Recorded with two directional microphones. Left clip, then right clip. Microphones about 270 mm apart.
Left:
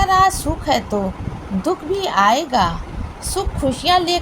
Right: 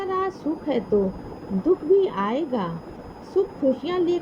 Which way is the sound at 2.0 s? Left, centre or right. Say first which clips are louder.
Left 8 dB; right.